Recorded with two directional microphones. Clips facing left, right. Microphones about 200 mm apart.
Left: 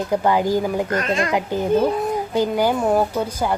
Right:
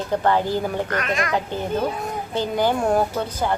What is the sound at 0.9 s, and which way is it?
Speech, 30° left (ahead or behind).